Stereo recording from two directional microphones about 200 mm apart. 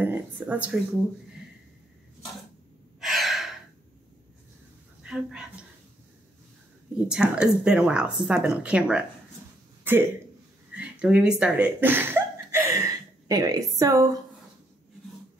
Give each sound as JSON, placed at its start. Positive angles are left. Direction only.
{"t": 0.0, "sound": "speech", "side_deg": -10}
{"t": 3.0, "sound": "gasp", "side_deg": 0}
{"t": 5.0, "sound": "a woman's voice", "side_deg": -5}
{"t": 7.1, "sound": "speech", "side_deg": -5}